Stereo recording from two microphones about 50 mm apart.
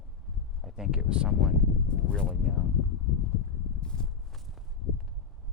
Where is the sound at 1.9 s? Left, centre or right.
Centre.